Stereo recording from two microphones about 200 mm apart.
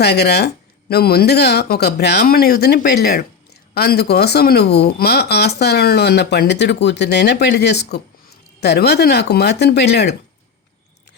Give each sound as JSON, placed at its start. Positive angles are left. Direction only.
{"t": 0.0, "sound": "speech", "side_deg": 55}